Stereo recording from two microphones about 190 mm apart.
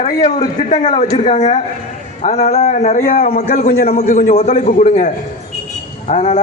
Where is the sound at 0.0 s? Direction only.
35° left (ahead or behind).